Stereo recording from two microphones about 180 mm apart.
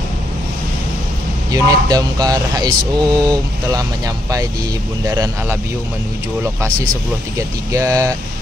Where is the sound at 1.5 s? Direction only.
20° right (ahead or behind).